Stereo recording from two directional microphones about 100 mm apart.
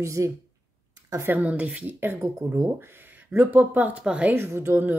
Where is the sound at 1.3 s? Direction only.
15° right (ahead or behind).